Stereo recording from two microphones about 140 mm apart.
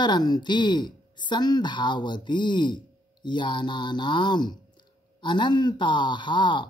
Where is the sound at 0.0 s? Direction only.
30° left (ahead or behind).